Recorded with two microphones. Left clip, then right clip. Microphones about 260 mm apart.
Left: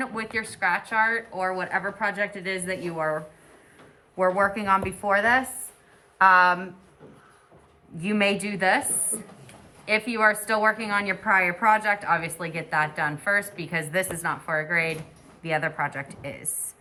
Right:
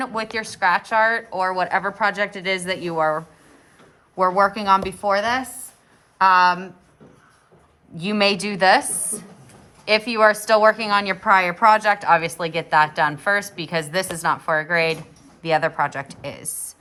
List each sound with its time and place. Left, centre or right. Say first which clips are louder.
0.0 s a woman's voice: right 4 dB; centre
7.9 s speech: right 4 dB; centre
9.8 s a woman's voice: right 5 dB; centre